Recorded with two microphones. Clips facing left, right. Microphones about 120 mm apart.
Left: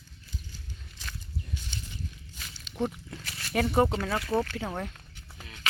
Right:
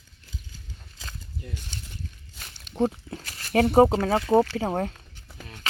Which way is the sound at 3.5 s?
60° right (ahead or behind).